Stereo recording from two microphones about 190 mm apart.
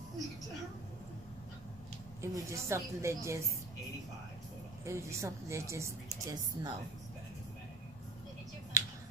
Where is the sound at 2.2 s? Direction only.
15° right (ahead or behind).